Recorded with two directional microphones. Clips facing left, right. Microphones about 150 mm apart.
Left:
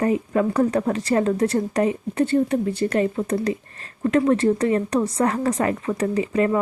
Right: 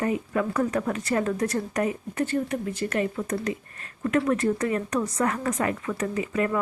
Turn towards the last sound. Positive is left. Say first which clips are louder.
# left 5 dB
turn(degrees=30)  # may be behind; listen again after turning